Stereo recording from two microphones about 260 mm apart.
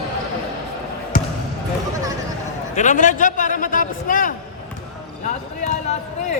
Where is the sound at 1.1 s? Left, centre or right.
Left.